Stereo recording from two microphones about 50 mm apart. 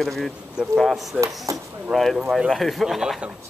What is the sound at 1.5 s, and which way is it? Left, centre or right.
Speech, right.